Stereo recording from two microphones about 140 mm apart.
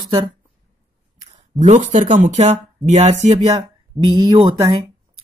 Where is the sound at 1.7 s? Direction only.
60° right (ahead or behind).